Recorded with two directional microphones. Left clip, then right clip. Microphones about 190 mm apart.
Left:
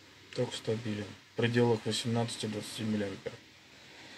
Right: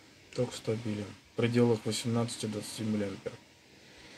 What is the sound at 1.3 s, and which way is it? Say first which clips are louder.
Speech: right 1 dB; 10° right (ahead or behind).